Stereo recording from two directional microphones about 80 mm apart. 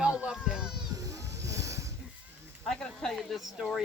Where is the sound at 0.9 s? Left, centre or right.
Right.